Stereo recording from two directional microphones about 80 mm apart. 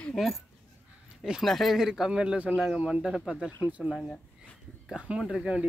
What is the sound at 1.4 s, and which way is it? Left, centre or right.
Speech, centre.